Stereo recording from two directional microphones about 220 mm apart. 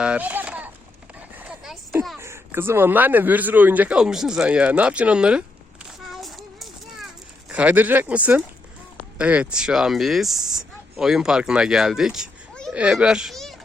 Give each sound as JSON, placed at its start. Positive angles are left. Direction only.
{"t": 0.0, "sound": "a sound", "side_deg": -5}
{"t": 7.5, "sound": "speech", "side_deg": -5}
{"t": 10.3, "sound": "speech", "side_deg": -15}
{"t": 10.9, "sound": "a child's voice", "side_deg": 0}